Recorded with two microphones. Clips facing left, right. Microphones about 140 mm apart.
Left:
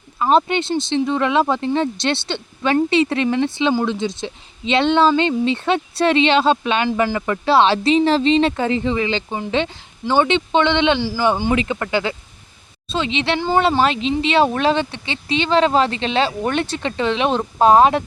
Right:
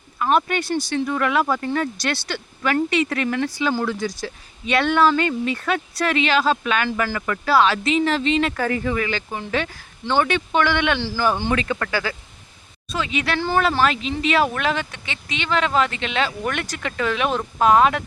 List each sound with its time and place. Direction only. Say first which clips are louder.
0.2 s speech: left 4 dB; 25° left (ahead or behind)